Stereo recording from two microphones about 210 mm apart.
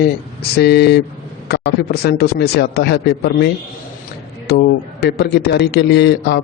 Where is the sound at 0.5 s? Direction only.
50° left (ahead or behind).